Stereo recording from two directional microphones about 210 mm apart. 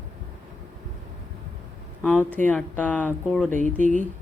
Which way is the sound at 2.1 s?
10° left (ahead or behind).